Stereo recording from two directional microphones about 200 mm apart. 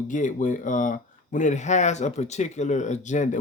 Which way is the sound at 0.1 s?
40° left (ahead or behind).